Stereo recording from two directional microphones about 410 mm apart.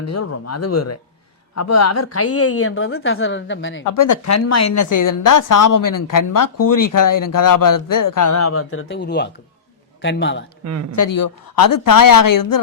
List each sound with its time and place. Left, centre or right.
0.0 s a woman's voice: left
3.9 s a woman's voice: left
10.6 s speech: right
10.9 s a woman's voice: left